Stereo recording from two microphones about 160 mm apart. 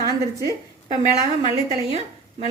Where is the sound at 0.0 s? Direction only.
20° right (ahead or behind).